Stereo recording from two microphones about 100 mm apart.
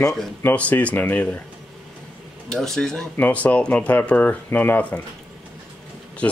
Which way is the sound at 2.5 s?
5° left (ahead or behind).